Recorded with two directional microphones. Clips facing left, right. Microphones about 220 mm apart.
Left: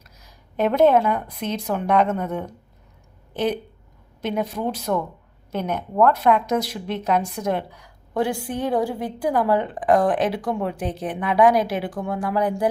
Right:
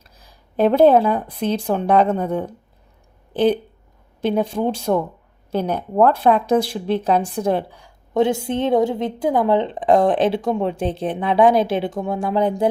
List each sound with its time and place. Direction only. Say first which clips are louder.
0.2 s speech: right 5 dB; 30° right (ahead or behind)